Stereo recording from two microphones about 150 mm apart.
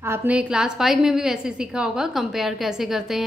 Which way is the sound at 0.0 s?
15° right (ahead or behind).